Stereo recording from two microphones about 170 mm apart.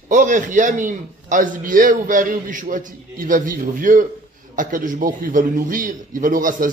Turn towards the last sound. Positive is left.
turn(degrees=-50)  # may be behind; listen again after turning